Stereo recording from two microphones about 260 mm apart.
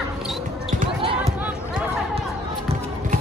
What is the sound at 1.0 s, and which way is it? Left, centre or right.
Basketball bounce, centre.